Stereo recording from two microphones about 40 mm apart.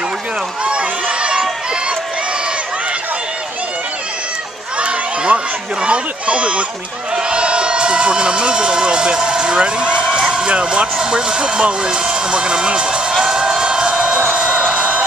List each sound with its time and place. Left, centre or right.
0.7 s run: right
4.7 s a sound: right
7.2 s speech: right
10.1 s a sound: right
11.0 s speech: centre
13.2 s music: centre
14.3 s music: right